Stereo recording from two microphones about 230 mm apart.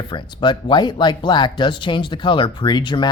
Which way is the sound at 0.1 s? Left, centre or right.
Centre.